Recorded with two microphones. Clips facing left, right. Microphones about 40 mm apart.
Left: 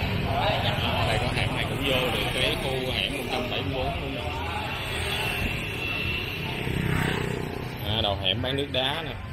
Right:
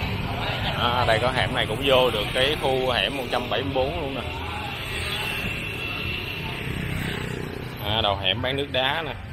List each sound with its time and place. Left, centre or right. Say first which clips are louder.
0.7 s speech: right 5 dB; right
2.4 s speech: right 5 dB; right
7.9 s speech: right 3 dB; centre